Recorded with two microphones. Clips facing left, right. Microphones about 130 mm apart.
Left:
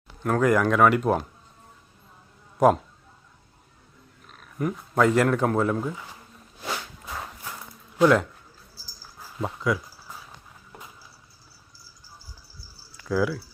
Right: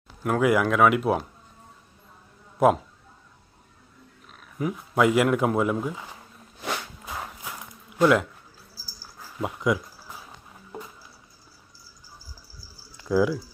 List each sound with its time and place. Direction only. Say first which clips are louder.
0.2 s speech: even; 5° right (ahead or behind)
4.3 s speech: left 1 dB; centre (ahead or behind)
6.6 s a sound: right 1 dB; 5° right (ahead or behind)
7.9 s speech: left 1 dB; centre (ahead or behind)
9.4 s speech: right 1 dB; 20° right (ahead or behind)
13.0 s speech: right 3 dB; 20° right (ahead or behind)